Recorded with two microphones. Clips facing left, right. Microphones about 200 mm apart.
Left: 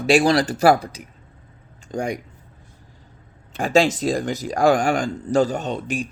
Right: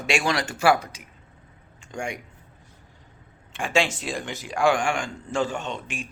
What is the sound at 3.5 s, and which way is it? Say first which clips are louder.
Speech: left 7 dB; 40° left (ahead or behind).